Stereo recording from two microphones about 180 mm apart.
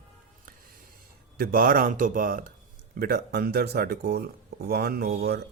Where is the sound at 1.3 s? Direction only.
55° right (ahead or behind).